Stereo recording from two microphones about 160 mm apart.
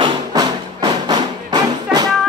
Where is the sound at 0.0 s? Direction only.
25° right (ahead or behind).